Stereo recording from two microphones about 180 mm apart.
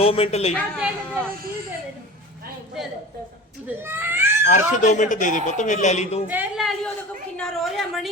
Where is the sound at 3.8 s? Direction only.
10° right (ahead or behind).